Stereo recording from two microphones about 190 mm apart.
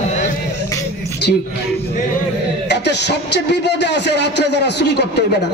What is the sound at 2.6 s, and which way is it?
A man's voice, 65° left (ahead or behind).